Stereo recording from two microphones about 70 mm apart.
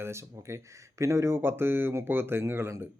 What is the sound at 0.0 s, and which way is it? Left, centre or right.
Speech, right.